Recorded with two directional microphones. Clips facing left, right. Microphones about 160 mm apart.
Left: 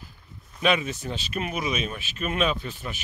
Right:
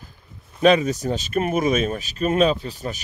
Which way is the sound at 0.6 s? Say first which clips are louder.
Right 8 dB; 40° right (ahead or behind).